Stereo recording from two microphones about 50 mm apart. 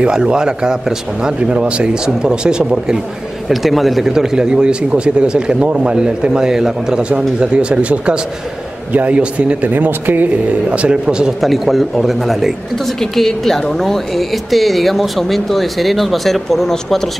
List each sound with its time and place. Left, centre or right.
0.0 s speech: centre
3.4 s speech: centre; by 10.3 s right
10.7 s a man's voice: right
11.4 s a woman's voice: centre